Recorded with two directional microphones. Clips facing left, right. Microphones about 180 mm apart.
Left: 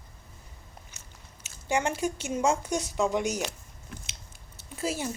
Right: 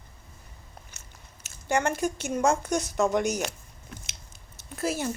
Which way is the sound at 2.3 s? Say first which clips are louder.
Right 2 dB; centre (ahead or behind).